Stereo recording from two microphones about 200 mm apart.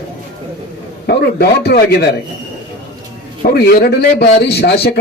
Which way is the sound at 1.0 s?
55° left (ahead or behind).